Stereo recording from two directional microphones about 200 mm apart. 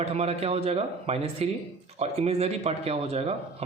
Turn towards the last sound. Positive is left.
turn(degrees=-30)  # may be behind; listen again after turning